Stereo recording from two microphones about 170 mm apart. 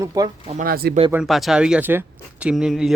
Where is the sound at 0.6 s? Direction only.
60° right (ahead or behind).